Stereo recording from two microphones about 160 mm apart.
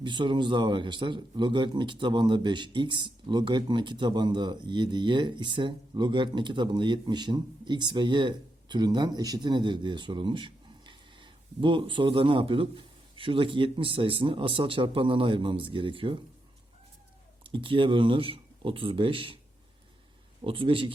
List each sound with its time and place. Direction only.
0.0 s a man's voice: 30° right (ahead or behind)
17.4 s speech: 30° right (ahead or behind)
20.4 s speech: 35° right (ahead or behind)